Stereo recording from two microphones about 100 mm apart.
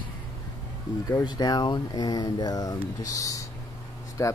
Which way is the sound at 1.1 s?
45° left (ahead or behind).